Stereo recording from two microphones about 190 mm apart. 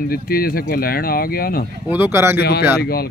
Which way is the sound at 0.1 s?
50° left (ahead or behind).